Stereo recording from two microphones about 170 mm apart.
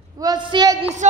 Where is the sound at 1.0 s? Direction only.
45° right (ahead or behind).